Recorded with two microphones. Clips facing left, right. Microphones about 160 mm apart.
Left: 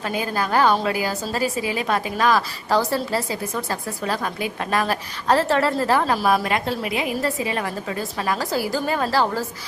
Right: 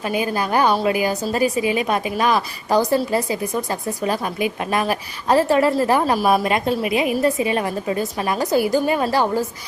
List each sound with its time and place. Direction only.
0.0 s a woman's voice: 15° right (ahead or behind)